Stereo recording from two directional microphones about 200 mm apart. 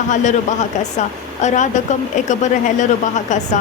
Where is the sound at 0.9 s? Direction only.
35° left (ahead or behind).